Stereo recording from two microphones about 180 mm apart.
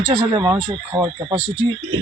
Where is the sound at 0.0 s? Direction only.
20° right (ahead or behind).